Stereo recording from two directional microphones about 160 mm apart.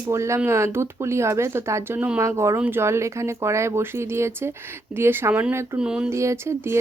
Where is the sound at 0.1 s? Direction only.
15° right (ahead or behind).